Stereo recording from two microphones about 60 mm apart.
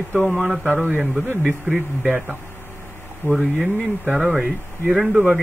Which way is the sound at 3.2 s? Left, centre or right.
Right.